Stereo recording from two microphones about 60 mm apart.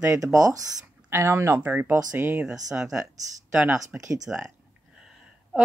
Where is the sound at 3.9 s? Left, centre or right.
Right.